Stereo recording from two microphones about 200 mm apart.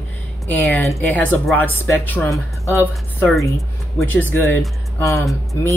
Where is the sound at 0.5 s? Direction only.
10° left (ahead or behind).